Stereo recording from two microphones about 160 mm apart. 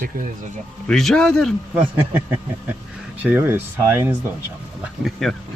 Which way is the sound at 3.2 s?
10° right (ahead or behind).